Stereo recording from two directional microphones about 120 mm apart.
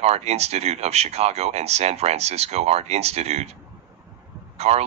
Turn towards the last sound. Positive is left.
turn(degrees=-60)  # may be behind; listen again after turning